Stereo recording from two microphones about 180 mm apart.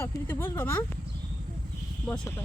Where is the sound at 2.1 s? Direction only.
10° left (ahead or behind).